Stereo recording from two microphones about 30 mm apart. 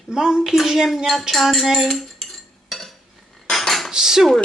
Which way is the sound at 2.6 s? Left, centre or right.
Centre.